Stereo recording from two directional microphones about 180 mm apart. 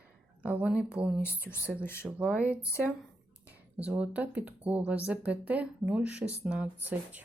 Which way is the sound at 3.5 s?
10° right (ahead or behind).